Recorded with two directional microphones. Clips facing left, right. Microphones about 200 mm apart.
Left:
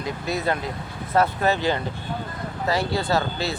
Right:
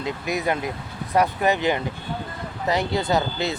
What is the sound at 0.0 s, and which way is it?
Speech, 15° right (ahead or behind).